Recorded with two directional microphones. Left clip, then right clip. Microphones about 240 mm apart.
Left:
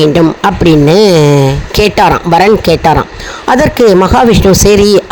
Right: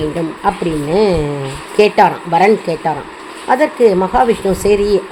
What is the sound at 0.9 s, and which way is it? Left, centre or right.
Speech, left.